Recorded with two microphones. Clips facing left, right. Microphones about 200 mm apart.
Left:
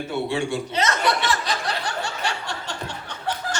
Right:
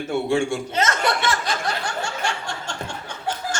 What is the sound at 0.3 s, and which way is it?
Chuckle, 50° right (ahead or behind).